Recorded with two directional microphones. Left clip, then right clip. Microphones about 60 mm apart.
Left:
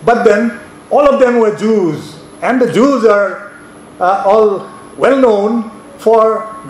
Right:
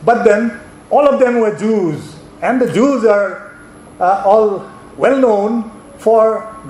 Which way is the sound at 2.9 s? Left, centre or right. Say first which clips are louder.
Left 1 dB; left.